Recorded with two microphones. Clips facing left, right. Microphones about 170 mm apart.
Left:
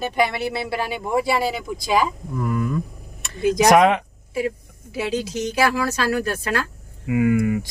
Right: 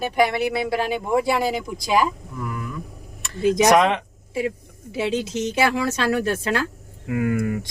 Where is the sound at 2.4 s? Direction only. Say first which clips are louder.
Left 7 dB; 35° left (ahead or behind).